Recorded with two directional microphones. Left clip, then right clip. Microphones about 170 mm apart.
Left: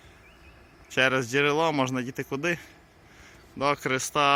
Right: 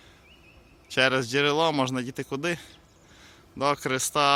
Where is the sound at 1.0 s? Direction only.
10° right (ahead or behind).